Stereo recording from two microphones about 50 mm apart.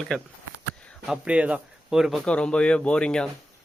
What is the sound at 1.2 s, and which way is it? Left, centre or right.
Speech, right.